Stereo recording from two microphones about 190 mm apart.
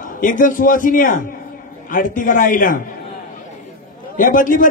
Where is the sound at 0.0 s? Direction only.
45° left (ahead or behind).